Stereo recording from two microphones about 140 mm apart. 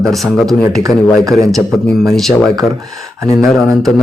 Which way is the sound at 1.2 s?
25° right (ahead or behind).